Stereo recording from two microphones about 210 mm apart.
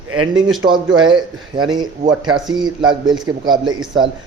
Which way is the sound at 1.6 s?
20° right (ahead or behind).